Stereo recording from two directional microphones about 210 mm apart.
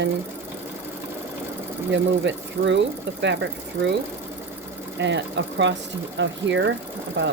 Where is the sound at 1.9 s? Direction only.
55° right (ahead or behind).